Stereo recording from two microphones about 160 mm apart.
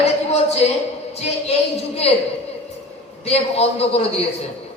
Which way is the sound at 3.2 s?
40° left (ahead or behind).